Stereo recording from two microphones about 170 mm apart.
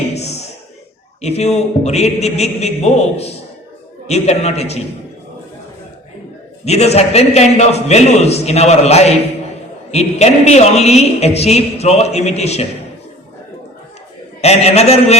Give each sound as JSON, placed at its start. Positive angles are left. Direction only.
{"t": 0.1, "sound": "a sound", "side_deg": 40}
{"t": 1.2, "sound": "a woman's voice", "side_deg": 40}
{"t": 6.7, "sound": "a woman's voice", "side_deg": 40}
{"t": 14.4, "sound": "a woman's voice", "side_deg": 40}